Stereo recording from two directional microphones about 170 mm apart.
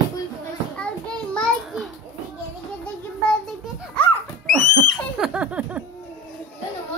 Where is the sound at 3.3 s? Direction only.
5° left (ahead or behind).